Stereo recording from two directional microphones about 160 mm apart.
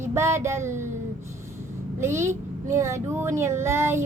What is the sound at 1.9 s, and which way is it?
A woman's voice, 15° right (ahead or behind).